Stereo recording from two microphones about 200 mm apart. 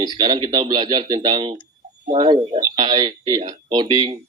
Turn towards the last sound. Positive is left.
turn(degrees=-25)  # may be behind; listen again after turning